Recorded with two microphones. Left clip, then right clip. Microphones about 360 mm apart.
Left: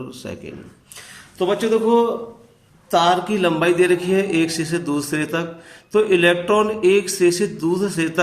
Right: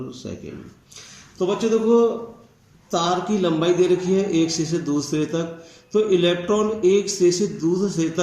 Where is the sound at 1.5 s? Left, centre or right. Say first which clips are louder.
Left 2 dB; left.